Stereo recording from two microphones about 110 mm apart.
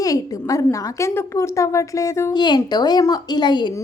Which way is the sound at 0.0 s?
30° left (ahead or behind).